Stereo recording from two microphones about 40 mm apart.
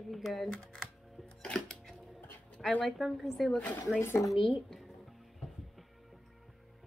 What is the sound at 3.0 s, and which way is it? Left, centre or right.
Speech, centre.